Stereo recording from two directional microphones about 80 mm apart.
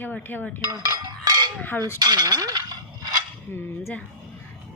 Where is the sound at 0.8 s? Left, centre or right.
Right.